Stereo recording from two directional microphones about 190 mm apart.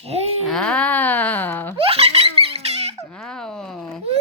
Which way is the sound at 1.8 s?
30° right (ahead or behind).